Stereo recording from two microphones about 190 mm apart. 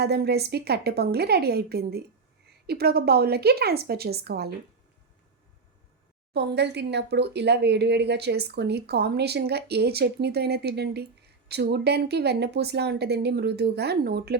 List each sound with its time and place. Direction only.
0.0 s speech: 60° right (ahead or behind)
6.3 s speech: 60° right (ahead or behind)